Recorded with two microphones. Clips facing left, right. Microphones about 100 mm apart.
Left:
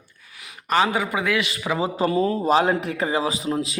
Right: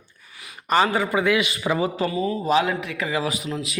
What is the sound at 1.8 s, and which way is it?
A man's voice, 30° left (ahead or behind).